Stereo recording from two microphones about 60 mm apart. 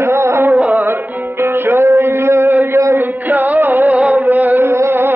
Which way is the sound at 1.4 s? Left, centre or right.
Right.